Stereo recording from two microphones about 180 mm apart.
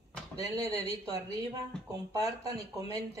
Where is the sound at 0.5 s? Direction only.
35° left (ahead or behind).